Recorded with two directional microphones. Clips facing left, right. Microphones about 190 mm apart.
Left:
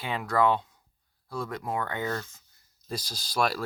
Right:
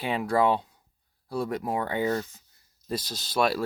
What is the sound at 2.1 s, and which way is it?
Speech, 15° right (ahead or behind).